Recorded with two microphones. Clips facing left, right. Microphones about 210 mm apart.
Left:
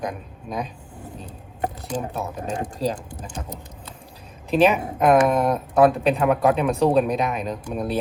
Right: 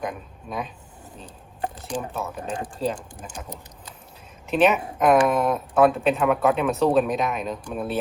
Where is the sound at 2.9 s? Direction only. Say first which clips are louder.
Left 2 dB; 20° left (ahead or behind).